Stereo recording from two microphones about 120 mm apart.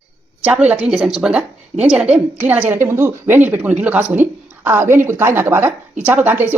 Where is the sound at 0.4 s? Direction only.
10° right (ahead or behind).